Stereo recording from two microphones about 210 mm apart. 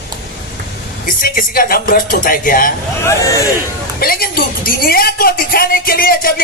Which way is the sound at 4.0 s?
45° left (ahead or behind).